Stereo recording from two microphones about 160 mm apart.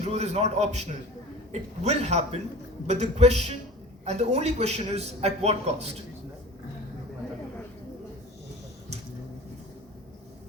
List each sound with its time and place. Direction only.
0.0 s a man's voice: 45° right (ahead or behind)